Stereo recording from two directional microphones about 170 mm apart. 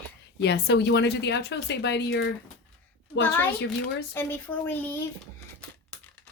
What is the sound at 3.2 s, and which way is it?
Speech, 10° left (ahead or behind).